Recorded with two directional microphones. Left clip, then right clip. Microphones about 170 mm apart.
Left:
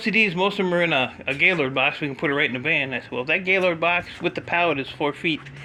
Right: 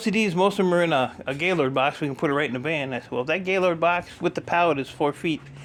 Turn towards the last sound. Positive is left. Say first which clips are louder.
# left 1 dB
turn(degrees=-25)  # may be behind; listen again after turning